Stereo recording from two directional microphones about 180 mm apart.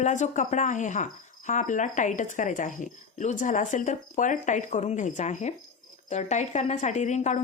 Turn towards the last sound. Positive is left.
turn(degrees=40)  # may be behind; listen again after turning